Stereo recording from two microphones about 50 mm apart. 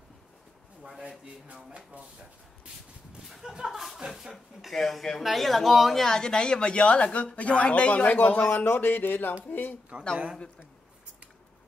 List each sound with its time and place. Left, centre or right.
1.0 s speech: right
3.3 s speech: centre
4.7 s speech: centre; by 9.8 s left